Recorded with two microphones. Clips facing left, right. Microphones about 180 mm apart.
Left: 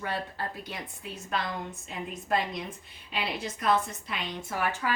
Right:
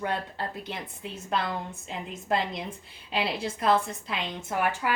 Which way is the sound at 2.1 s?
25° right (ahead or behind).